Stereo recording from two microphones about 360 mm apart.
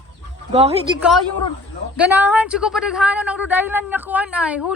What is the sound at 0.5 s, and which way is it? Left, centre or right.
Speech, centre.